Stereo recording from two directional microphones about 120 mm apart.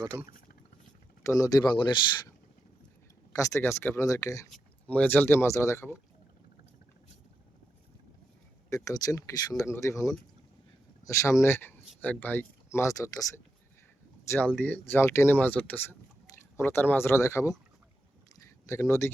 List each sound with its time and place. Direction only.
1.2 s speech: 30° left (ahead or behind)
3.3 s speech: 25° left (ahead or behind)
4.9 s speech: 15° left (ahead or behind)
8.7 s speech: 30° left (ahead or behind)
14.3 s speech: 15° left (ahead or behind)
18.6 s speech: 25° left (ahead or behind)